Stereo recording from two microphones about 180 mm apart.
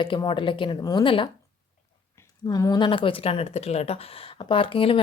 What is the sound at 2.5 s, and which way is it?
Speech, 20° left (ahead or behind).